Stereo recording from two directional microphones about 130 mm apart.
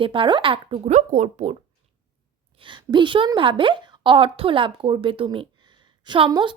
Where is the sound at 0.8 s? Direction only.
65° right (ahead or behind).